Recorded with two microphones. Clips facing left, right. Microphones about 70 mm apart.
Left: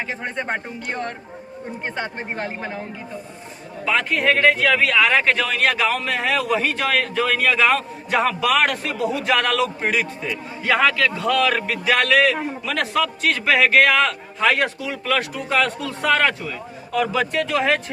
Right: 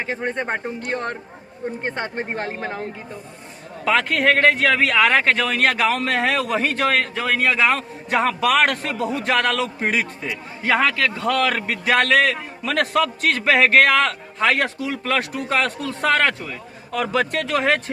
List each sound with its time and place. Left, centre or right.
1.8 s a man's voice: right
3.8 s a man's voice: right
8.2 s a man's voice: right
10.2 s a man's voice: right